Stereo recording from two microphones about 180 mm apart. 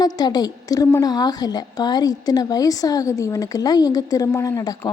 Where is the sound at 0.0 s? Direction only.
20° left (ahead or behind).